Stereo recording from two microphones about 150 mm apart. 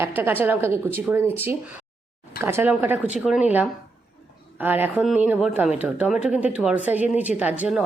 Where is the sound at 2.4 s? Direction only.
15° right (ahead or behind).